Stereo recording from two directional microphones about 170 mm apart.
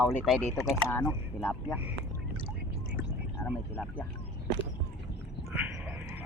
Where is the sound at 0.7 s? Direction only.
15° left (ahead or behind).